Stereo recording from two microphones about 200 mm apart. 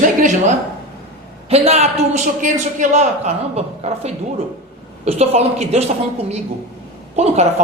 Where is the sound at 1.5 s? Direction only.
30° right (ahead or behind).